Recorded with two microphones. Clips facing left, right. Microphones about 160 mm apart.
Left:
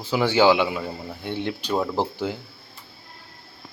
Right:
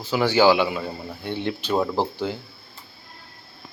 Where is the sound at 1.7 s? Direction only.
Centre (ahead or behind).